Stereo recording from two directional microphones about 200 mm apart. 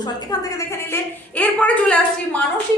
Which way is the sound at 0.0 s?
20° left (ahead or behind).